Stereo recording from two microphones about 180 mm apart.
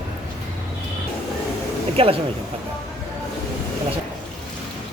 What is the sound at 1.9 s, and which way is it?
Speech, 30° right (ahead or behind).